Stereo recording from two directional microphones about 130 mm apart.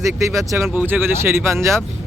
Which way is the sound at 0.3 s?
20° right (ahead or behind).